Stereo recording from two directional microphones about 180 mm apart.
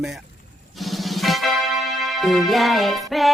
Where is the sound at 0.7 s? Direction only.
Centre (ahead or behind).